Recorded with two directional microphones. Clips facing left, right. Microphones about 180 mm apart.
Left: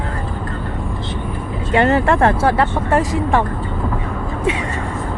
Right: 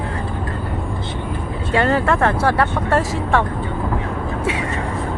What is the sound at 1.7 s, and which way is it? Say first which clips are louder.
Speech: left 3 dB; 25° left (ahead or behind).